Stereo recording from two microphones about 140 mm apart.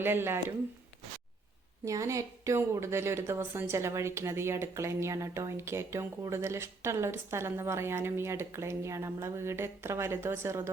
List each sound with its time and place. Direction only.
0.0 s speech: 15° right (ahead or behind)
1.8 s a woman's voice: 20° right (ahead or behind)